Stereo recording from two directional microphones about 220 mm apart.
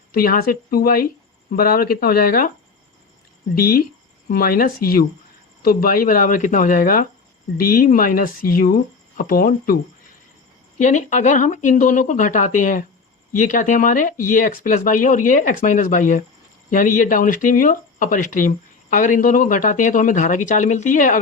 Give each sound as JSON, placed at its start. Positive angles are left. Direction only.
{"t": 0.1, "sound": "speech", "side_deg": 40}
{"t": 3.6, "sound": "speech", "side_deg": 40}
{"t": 10.8, "sound": "speech", "side_deg": 35}